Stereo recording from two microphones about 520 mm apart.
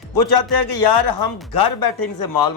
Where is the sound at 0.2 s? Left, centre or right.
Left.